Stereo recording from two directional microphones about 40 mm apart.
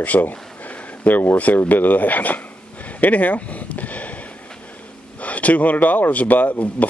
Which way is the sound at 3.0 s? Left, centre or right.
Left.